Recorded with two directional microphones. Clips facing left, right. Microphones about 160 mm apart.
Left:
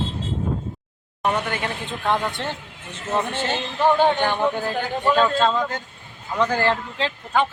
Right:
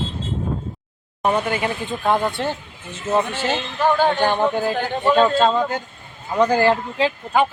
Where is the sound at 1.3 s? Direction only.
10° right (ahead or behind).